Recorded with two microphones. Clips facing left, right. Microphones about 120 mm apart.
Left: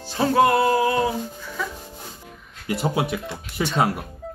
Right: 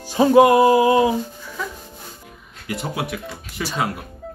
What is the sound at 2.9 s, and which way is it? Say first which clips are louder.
Speech: left 3 dB; 25° left (ahead or behind).